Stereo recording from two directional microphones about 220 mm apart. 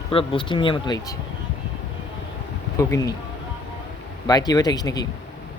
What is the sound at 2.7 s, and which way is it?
Speech, 15° left (ahead or behind).